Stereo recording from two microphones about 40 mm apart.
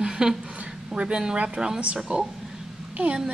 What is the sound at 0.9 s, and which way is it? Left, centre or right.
Speech, right.